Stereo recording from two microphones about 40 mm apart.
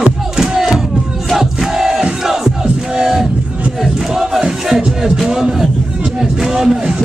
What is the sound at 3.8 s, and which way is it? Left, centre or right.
Music, centre.